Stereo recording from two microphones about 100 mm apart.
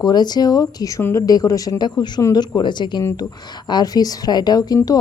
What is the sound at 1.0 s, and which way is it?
Speech, 25° left (ahead or behind).